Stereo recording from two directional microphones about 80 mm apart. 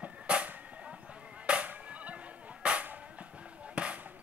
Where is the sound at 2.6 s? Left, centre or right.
Centre.